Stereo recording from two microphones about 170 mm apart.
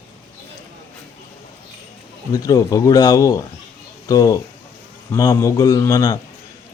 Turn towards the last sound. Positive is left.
turn(degrees=20)  # may be behind; listen again after turning